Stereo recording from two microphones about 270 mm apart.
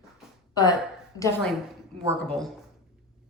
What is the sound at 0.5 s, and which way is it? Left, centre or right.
A woman's voice, centre.